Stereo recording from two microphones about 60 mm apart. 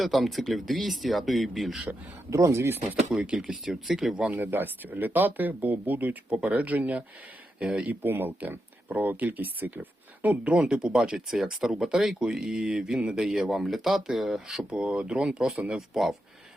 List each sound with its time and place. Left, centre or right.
0.0 s speech: centre
2.3 s speech: right
3.3 s speech: centre
4.3 s speech: right
8.0 s speech: right
10.2 s speech: centre